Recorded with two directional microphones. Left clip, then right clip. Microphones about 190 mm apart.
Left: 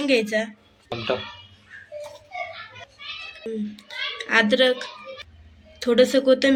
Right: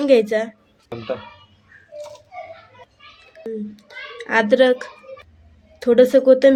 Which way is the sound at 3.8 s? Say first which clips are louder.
Left 4 dB; 45° right (ahead or behind).